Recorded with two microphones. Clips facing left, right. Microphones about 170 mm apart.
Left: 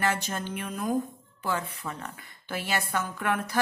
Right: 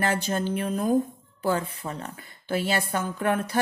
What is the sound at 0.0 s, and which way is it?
Speech, 30° right (ahead or behind).